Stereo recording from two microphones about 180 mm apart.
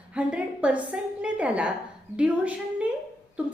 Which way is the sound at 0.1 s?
5° right (ahead or behind).